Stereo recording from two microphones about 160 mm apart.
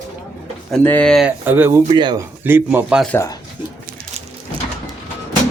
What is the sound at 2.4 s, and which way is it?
Speech, 15° right (ahead or behind).